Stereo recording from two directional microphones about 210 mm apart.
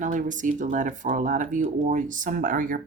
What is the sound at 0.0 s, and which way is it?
A woman's voice, 35° right (ahead or behind).